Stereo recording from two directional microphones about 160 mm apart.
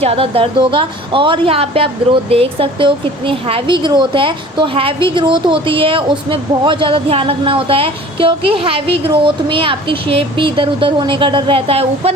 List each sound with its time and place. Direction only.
0.0 s speech: 35° right (ahead or behind)